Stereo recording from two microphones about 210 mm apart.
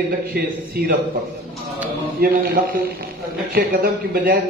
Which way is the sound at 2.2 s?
50° right (ahead or behind).